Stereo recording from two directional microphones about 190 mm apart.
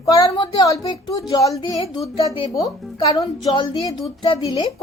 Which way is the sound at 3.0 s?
20° left (ahead or behind).